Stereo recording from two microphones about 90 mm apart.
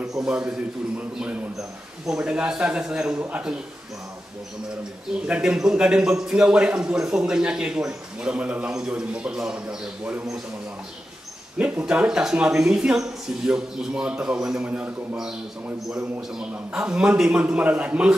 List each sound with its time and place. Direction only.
0.0 s a man's voice: 5° right (ahead or behind)
5.2 s a man's voice: 10° right (ahead or behind)
11.5 s a man's voice: 10° right (ahead or behind)
15.9 s a man's voice: 5° right (ahead or behind)